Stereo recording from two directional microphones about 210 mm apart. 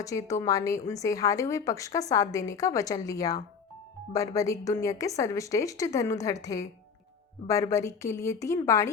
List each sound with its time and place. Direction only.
0.0 s a woman's voice: 15° left (ahead or behind)